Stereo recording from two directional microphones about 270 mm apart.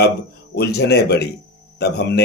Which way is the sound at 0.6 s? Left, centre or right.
Left.